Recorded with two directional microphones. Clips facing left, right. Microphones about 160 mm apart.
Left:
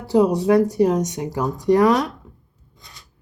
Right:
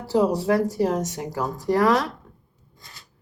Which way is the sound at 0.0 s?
20° left (ahead or behind).